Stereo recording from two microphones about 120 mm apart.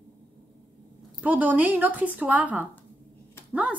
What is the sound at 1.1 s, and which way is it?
A woman's voice, 15° right (ahead or behind).